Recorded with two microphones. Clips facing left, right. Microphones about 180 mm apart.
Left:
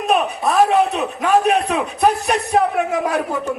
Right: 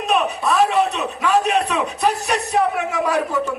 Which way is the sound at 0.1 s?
55° left (ahead or behind).